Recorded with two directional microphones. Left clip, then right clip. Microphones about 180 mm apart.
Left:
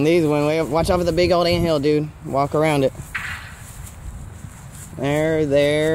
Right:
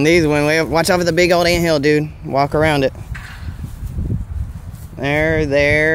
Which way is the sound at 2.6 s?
5° right (ahead or behind).